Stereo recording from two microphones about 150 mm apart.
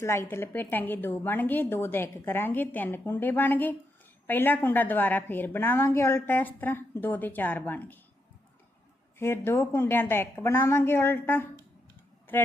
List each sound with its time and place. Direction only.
0.0 s a woman's voice: 15° left (ahead or behind)
9.1 s a woman's voice: 15° left (ahead or behind)